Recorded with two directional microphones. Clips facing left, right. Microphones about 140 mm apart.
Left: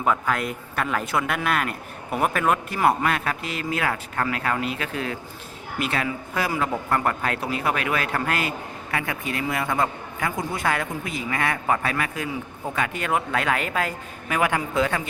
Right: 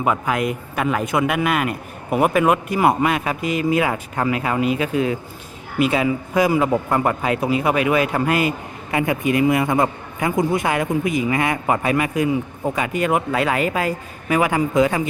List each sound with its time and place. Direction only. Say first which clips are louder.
0.0 s a man's voice: right 3 dB; 10° right (ahead or behind)